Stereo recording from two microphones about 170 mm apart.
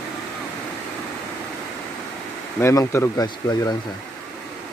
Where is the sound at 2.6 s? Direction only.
15° left (ahead or behind).